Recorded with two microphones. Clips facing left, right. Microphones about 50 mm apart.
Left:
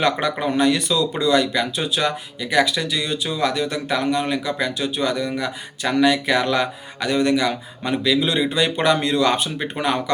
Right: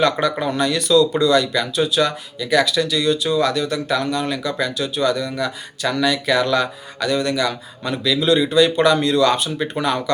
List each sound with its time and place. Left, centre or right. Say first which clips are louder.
0.0 s speech: right 2 dB; centre